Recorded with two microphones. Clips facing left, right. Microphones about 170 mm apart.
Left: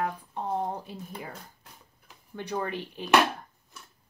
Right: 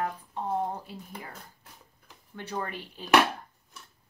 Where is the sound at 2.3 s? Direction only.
15° left (ahead or behind).